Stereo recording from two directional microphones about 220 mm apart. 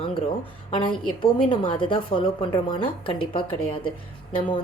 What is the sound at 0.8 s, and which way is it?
A woman's voice, 25° left (ahead or behind).